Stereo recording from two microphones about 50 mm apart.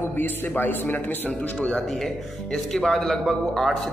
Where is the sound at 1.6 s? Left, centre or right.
Left.